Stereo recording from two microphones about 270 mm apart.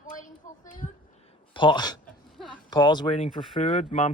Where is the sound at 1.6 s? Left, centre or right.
Centre.